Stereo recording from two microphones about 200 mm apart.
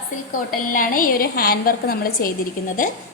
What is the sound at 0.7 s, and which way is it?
A woman's voice, 45° left (ahead or behind).